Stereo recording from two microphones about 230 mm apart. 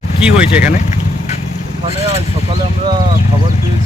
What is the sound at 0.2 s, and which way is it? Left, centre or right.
Speech, centre.